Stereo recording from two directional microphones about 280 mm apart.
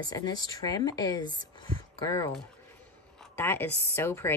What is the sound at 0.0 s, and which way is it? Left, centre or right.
Speech, centre.